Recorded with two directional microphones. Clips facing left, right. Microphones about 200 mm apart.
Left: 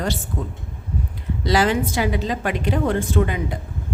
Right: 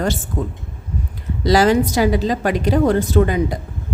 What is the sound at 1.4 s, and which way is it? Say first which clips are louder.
A woman's voice: right 5 dB; 40° right (ahead or behind).